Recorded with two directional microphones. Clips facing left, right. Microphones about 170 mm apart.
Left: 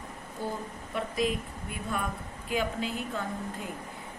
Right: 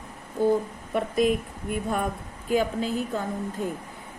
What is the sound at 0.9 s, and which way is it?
A woman's voice, 50° right (ahead or behind).